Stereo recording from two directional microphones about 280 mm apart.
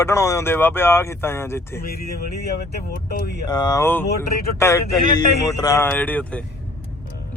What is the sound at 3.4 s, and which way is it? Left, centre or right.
A man's voice, centre.